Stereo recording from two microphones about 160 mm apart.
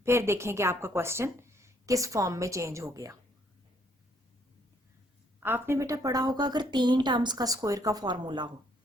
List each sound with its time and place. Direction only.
0.0 s a woman's voice: 15° right (ahead or behind)
5.4 s a woman's voice: 15° right (ahead or behind); by 8.4 s 30° right (ahead or behind)